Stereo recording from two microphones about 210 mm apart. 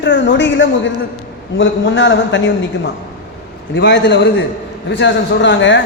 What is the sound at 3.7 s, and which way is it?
A man's voice, 55° left (ahead or behind).